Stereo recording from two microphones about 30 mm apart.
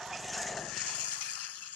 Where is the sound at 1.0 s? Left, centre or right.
Left.